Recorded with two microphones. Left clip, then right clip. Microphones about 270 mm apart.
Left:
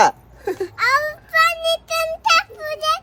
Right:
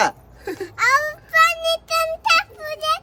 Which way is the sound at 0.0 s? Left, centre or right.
Centre.